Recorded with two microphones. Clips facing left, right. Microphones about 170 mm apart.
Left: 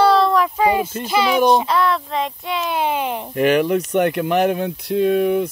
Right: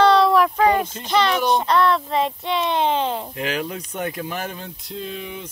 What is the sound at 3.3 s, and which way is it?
Speech, 65° left (ahead or behind).